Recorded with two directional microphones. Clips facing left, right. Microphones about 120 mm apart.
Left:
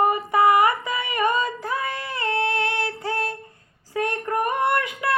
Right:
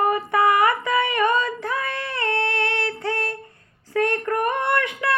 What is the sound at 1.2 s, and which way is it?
Child singing, 15° left (ahead or behind).